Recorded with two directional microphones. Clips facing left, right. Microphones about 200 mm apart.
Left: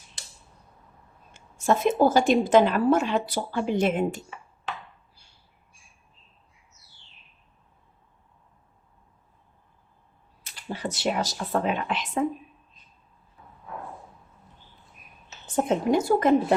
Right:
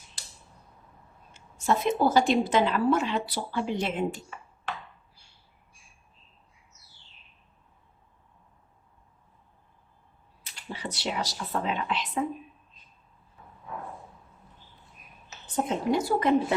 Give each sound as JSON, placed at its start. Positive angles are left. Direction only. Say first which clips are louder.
{"t": 1.3, "sound": "a woman's voice", "louder": "left 3 dB", "side_deg": 45}
{"t": 10.4, "sound": "a woman's voice", "louder": "left 5 dB", "side_deg": 45}
{"t": 15.5, "sound": "a woman's voice", "louder": "left 4 dB", "side_deg": 50}